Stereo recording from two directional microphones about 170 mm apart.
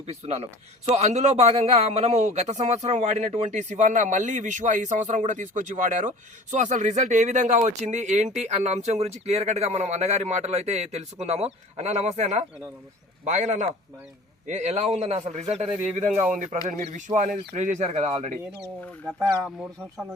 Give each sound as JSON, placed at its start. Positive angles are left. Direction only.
{"t": 0.0, "sound": "a man's voice", "side_deg": -40}
{"t": 16.1, "sound": "speech", "side_deg": -5}
{"t": 16.6, "sound": "a man's voice", "side_deg": -45}
{"t": 19.5, "sound": "speech", "side_deg": 0}